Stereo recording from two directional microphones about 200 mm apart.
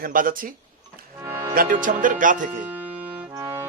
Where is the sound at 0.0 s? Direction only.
45° right (ahead or behind).